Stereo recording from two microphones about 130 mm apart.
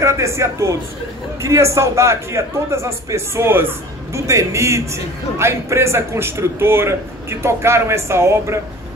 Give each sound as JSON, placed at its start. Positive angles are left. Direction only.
{"t": 0.0, "sound": "a man's voice", "side_deg": -20}